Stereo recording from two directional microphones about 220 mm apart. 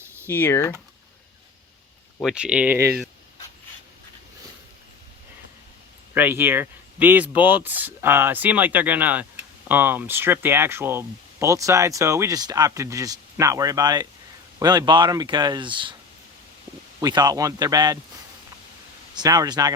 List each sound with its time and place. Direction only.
0.3 s speech: 10° left (ahead or behind)
2.2 s speech: 5° right (ahead or behind)
6.1 s speech: 10° right (ahead or behind)
17.0 s speech: 20° right (ahead or behind)
19.1 s speech: 15° right (ahead or behind)